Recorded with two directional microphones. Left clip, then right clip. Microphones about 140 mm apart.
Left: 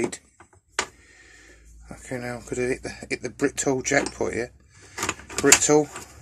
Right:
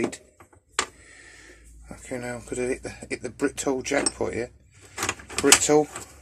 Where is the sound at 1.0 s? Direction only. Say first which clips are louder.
Right 2 dB; 15° right (ahead or behind).